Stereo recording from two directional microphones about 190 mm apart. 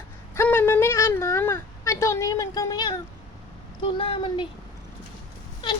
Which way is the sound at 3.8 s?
25° left (ahead or behind).